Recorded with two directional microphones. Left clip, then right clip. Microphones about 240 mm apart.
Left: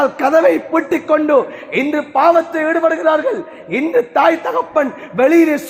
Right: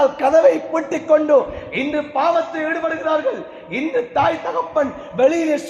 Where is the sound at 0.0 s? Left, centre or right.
Left.